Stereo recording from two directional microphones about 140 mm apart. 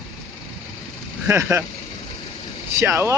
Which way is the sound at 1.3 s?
15° right (ahead or behind).